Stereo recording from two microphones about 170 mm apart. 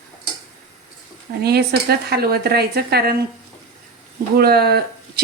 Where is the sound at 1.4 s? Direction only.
70° right (ahead or behind).